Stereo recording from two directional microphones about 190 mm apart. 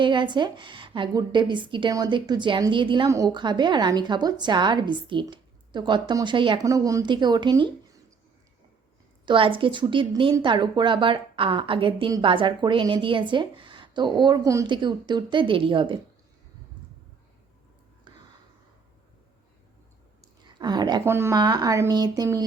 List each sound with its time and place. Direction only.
0.0 s a woman's voice: 25° right (ahead or behind)
9.2 s a woman's voice: 25° right (ahead or behind)
20.4 s a sound: 20° right (ahead or behind)
21.0 s a woman's voice: 10° right (ahead or behind)